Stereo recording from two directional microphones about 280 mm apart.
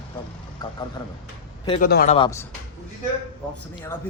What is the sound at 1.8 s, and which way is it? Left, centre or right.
Speech, left.